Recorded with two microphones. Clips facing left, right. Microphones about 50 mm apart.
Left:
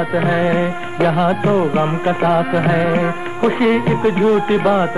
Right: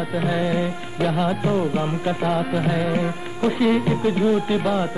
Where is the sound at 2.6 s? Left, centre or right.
Left.